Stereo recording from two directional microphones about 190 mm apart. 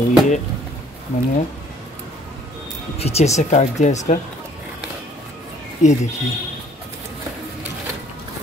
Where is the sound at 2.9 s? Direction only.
35° left (ahead or behind).